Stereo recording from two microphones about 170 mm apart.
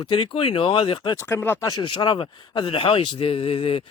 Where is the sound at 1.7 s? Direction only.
25° left (ahead or behind).